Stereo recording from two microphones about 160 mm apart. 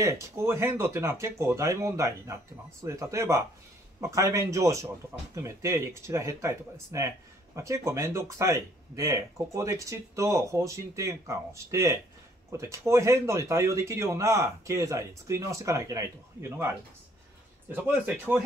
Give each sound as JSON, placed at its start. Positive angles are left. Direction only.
{"t": 0.0, "sound": "speech", "side_deg": -15}